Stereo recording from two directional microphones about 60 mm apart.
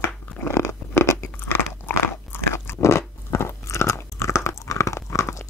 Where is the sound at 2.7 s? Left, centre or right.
Left.